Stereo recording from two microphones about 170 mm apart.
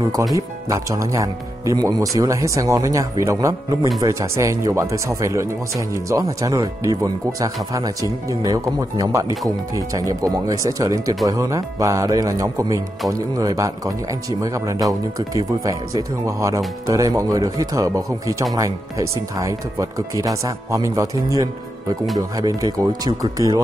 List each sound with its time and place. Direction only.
0.3 s speech: 20° right (ahead or behind)